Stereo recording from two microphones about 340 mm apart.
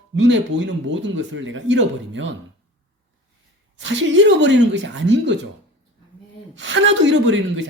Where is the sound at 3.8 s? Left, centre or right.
Right.